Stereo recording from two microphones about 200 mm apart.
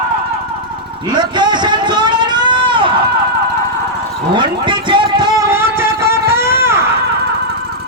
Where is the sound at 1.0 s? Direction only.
20° right (ahead or behind).